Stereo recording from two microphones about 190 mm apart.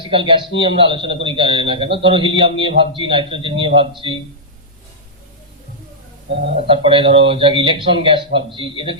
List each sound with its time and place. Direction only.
0.1 s a man's voice: 25° right (ahead or behind)
6.7 s a man's voice: 30° right (ahead or behind)